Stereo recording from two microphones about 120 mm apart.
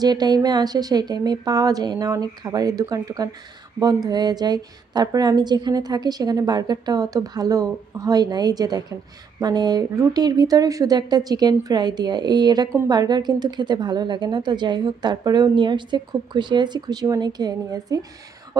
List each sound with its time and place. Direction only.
0.0 s a woman's voice: 35° right (ahead or behind)